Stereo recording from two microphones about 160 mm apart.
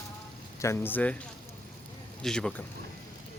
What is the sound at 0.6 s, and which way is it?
Speech, 15° left (ahead or behind).